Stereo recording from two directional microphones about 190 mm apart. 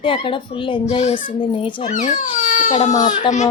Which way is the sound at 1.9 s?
45° left (ahead or behind).